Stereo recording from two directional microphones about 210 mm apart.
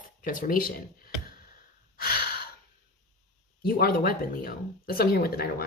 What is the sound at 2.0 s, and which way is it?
Breathing, 45° left (ahead or behind).